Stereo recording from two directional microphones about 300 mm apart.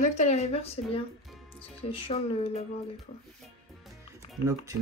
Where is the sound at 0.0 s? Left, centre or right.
Left.